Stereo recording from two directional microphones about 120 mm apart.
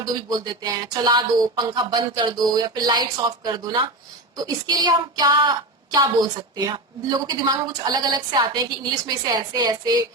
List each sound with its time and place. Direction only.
0.0 s a woman's voice: 35° right (ahead or behind)